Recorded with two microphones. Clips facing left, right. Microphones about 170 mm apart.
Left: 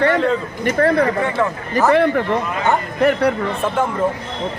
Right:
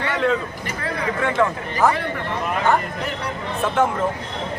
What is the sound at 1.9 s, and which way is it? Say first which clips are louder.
Speech: left 9 dB; 60° left (ahead or behind).